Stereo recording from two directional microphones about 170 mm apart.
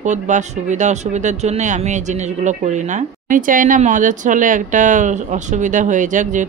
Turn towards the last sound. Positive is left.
turn(degrees=-50)  # may be behind; listen again after turning